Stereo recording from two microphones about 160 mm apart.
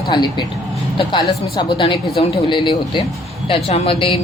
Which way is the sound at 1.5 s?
30° left (ahead or behind).